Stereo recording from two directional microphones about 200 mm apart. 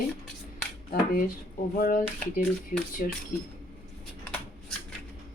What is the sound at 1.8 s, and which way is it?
A woman's voice, 45° left (ahead or behind).